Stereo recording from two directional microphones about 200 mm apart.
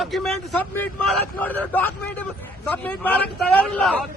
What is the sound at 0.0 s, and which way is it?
A man's voice, 5° left (ahead or behind).